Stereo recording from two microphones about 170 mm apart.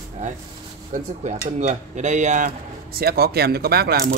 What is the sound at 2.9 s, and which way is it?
Speech, 65° right (ahead or behind).